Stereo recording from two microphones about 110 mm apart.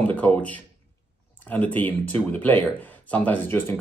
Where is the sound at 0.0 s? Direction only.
15° left (ahead or behind).